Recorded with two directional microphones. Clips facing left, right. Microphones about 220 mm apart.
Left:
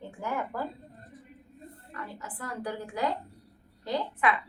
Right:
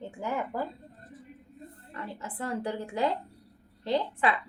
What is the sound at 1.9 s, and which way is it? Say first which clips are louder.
A woman's voice: right 3 dB; 25° right (ahead or behind).